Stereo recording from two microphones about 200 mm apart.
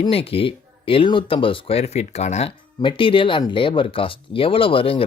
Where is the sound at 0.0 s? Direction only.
30° left (ahead or behind).